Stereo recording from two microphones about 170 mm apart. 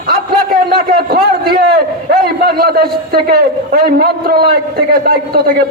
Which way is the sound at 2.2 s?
65° right (ahead or behind).